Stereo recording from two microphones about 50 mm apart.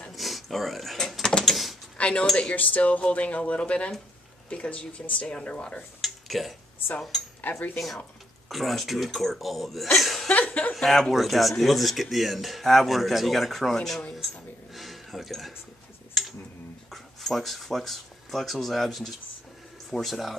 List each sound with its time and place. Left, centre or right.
0.1 s a sound: centre
1.4 s door: centre
2.0 s a sound: left
2.5 s speech: left
5.9 s a sound: centre
7.4 s speech: left
8.5 s speech: centre
10.3 s speech: left
10.7 s speech: centre
16.2 s tick: centre
16.9 s speech: centre